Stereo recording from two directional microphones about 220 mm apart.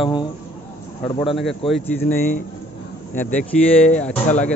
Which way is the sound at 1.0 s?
25° left (ahead or behind).